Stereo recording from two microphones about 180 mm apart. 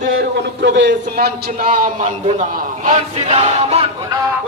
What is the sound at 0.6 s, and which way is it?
Speech, 75° right (ahead or behind).